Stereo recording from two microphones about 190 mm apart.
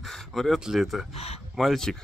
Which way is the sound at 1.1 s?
35° left (ahead or behind).